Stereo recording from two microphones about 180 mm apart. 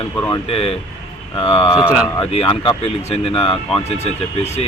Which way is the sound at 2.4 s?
30° left (ahead or behind).